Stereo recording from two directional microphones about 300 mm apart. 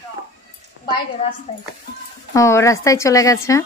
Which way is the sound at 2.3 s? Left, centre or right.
Centre.